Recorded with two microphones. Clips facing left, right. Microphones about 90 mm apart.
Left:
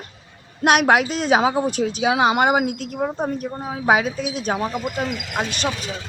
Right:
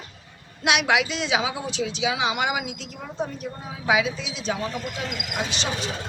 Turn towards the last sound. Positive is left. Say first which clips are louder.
# left 4 dB
turn(degrees=50)  # may be behind; listen again after turning